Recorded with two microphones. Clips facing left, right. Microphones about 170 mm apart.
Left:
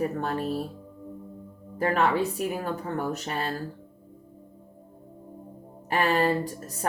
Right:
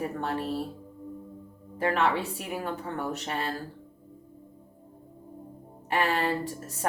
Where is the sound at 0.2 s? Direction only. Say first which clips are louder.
Left 2 dB; 40° left (ahead or behind).